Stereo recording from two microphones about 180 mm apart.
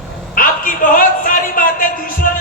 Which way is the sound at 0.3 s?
50° left (ahead or behind).